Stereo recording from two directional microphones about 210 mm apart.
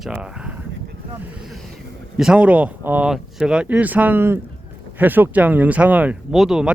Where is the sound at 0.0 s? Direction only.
5° right (ahead or behind).